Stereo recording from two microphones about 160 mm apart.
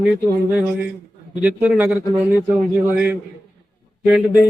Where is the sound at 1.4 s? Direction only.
10° right (ahead or behind).